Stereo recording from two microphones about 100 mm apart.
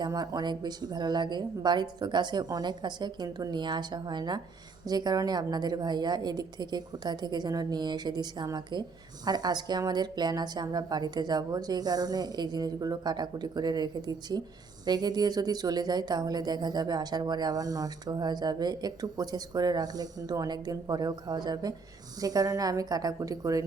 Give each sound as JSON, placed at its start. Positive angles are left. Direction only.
{"t": 0.0, "sound": "speech", "side_deg": -40}